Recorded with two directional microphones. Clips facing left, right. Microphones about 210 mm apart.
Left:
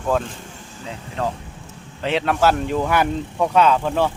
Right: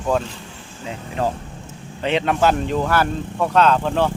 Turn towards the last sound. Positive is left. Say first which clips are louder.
# even
turn(degrees=10)  # may be behind; listen again after turning